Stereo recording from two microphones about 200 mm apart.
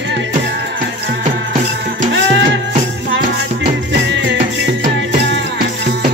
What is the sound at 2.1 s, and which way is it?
Music, 65° right (ahead or behind).